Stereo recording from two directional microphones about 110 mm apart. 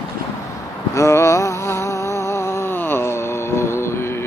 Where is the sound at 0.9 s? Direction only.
25° left (ahead or behind).